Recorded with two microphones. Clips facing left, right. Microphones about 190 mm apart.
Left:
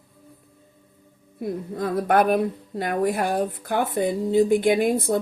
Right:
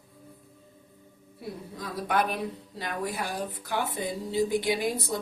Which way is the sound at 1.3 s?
55° left (ahead or behind).